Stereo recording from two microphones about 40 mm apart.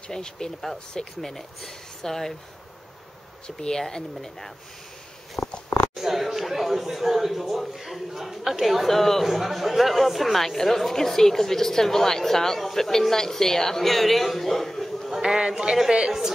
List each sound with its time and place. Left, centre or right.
0.1 s speech: centre
3.5 s speech: centre
5.4 s a sound: left
5.9 s speech: centre
8.8 s speech: centre
15.0 s speech: centre